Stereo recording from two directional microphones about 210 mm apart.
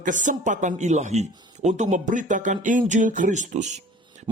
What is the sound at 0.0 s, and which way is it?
A man's voice, 35° right (ahead or behind).